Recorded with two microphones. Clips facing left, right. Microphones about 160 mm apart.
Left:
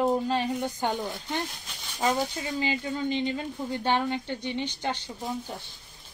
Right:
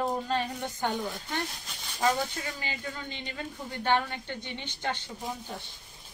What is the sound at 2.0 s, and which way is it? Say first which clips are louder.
Speech: left 1 dB; 20° left (ahead or behind).